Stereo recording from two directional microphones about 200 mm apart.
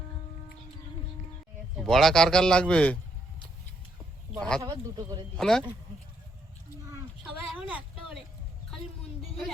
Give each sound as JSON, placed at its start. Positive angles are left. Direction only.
{"t": 1.7, "sound": "a man's voice", "side_deg": 0}
{"t": 4.4, "sound": "a man's voice", "side_deg": 5}
{"t": 4.6, "sound": "speech", "side_deg": -20}
{"t": 5.4, "sound": "a man's voice", "side_deg": 5}
{"t": 7.4, "sound": "speech", "side_deg": -5}